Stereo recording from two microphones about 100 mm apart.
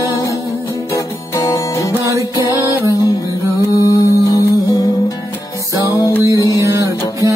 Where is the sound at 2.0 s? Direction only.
35° right (ahead or behind).